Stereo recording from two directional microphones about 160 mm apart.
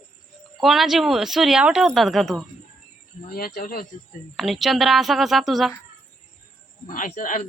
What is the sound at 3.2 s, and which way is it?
Speech, 65° left (ahead or behind).